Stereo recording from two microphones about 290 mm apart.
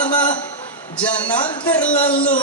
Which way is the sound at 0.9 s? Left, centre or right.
Centre.